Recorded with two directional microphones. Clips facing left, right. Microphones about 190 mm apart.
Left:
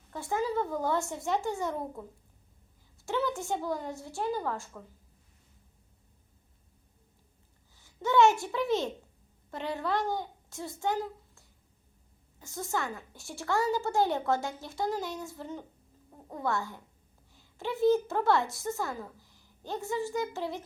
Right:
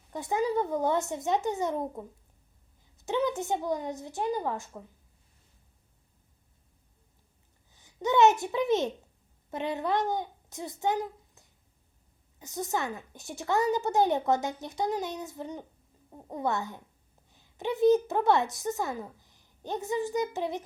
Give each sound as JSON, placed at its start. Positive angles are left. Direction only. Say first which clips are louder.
{"t": 0.1, "sound": "a woman's voice", "louder": "right 3 dB", "side_deg": -20}
{"t": 3.1, "sound": "a woman's voice", "louder": "right 3 dB", "side_deg": -20}
{"t": 7.7, "sound": "a child's voice", "louder": "right 1 dB", "side_deg": -20}